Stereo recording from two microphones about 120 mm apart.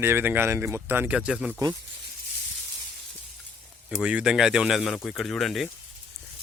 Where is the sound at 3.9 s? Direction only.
10° right (ahead or behind).